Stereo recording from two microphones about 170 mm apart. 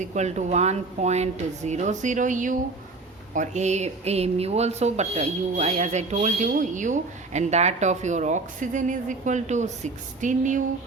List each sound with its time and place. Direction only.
0.0 s speech: 45° right (ahead or behind)